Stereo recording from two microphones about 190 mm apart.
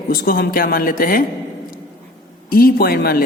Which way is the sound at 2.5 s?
50° left (ahead or behind).